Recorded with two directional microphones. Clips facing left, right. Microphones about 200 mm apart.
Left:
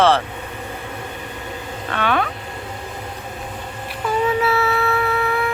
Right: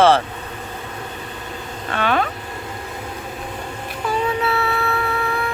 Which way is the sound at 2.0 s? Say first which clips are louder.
Right 1 dB; 40° right (ahead or behind).